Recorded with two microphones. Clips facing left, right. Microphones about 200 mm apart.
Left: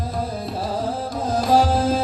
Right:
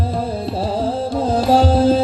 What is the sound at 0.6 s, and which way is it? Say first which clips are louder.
Music: right 5 dB; 30° right (ahead or behind).